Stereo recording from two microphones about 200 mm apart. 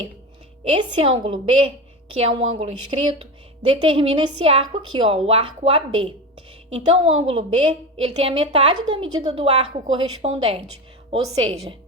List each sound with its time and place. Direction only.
0.7 s a woman's voice: 30° right (ahead or behind)